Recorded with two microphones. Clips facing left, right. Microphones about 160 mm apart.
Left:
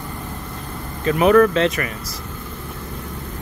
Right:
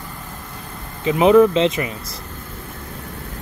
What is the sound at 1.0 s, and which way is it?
Speech, 15° right (ahead or behind).